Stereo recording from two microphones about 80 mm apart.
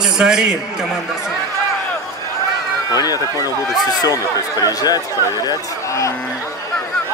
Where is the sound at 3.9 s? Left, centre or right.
Left.